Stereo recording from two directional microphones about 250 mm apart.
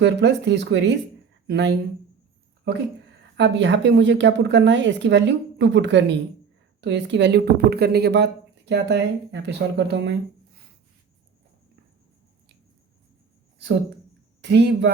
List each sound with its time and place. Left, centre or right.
0.0 s speech: right
14.5 s speech: right